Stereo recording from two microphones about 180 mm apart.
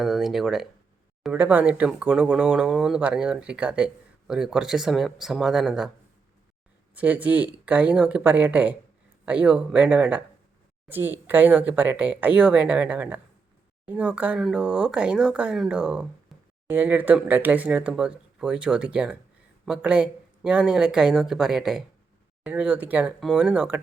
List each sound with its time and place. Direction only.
0.0 s speech: centre (ahead or behind)
6.9 s speech: 10° right (ahead or behind)